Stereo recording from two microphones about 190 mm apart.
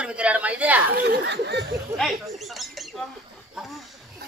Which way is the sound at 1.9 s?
Centre (ahead or behind).